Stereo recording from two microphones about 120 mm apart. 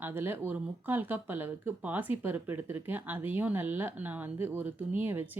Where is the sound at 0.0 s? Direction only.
20° right (ahead or behind).